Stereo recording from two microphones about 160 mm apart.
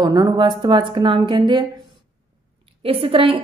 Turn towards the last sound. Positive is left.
turn(degrees=-35)  # may be behind; listen again after turning